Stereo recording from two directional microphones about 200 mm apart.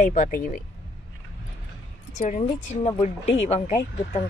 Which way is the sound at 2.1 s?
40° left (ahead or behind).